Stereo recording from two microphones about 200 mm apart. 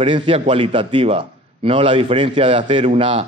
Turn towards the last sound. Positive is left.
turn(degrees=-30)  # may be behind; listen again after turning